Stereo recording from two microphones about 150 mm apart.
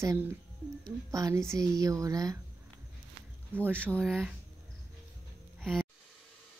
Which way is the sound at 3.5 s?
15° right (ahead or behind).